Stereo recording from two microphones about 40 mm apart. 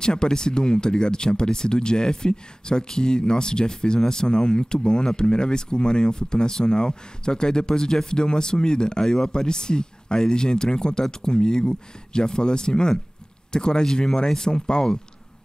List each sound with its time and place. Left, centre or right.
0.0 s speech: centre